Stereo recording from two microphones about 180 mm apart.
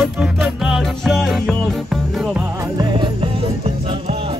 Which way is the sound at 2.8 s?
25° right (ahead or behind).